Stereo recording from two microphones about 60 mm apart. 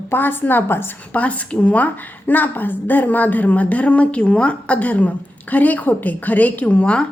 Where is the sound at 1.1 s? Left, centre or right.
Left.